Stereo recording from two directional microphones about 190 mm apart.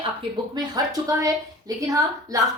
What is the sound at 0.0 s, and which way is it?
A woman's voice, 25° right (ahead or behind).